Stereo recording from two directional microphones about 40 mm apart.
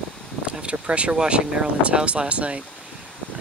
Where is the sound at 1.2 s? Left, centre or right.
Right.